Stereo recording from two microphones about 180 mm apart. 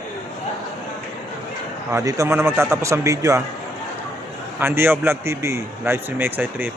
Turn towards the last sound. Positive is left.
turn(degrees=-10)  # may be behind; listen again after turning